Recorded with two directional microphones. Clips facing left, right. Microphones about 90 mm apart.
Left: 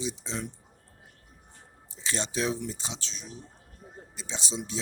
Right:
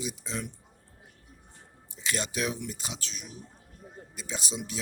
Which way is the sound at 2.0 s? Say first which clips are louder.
Left 1 dB; 30° left (ahead or behind).